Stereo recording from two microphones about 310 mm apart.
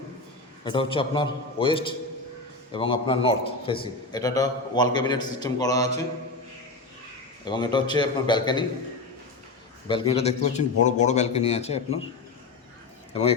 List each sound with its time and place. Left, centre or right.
0.6 s a man's voice: centre
7.4 s a man's voice: centre
9.9 s a man's voice: centre